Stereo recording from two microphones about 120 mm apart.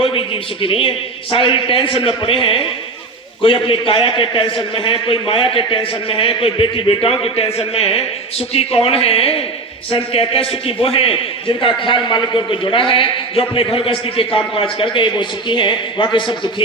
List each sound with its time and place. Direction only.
0.0 s a man's voice: 50° left (ahead or behind)